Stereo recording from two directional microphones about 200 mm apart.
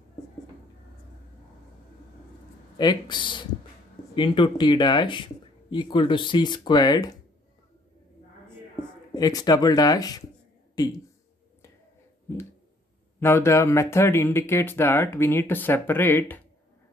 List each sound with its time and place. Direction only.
2.8 s speech: 20° left (ahead or behind)
9.1 s speech: 20° left (ahead or behind)
13.2 s speech: 10° left (ahead or behind)